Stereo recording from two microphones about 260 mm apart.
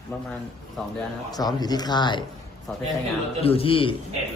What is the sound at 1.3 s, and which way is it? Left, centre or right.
Speech, centre.